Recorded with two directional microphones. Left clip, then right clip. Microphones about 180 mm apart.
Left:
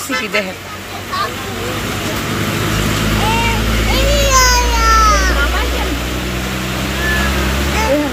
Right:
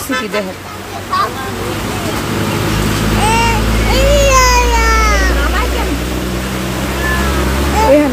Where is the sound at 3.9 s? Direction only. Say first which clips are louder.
Right 4 dB; 70° right (ahead or behind).